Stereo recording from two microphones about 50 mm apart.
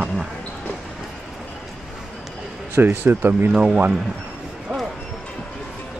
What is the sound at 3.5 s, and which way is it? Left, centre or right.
Speech, centre.